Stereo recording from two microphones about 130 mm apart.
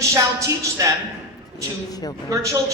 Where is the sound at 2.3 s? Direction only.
25° right (ahead or behind).